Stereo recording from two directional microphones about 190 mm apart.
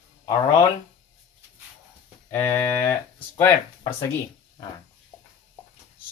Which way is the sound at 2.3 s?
10° left (ahead or behind).